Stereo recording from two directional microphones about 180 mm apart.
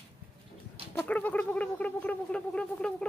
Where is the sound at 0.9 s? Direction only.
10° left (ahead or behind).